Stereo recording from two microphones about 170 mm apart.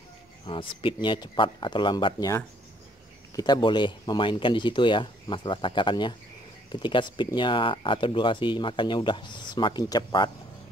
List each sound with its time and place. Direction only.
0.5 s speech: 30° left (ahead or behind)